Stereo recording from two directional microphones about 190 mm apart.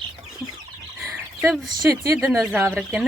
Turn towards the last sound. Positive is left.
turn(degrees=-5)  # may be behind; listen again after turning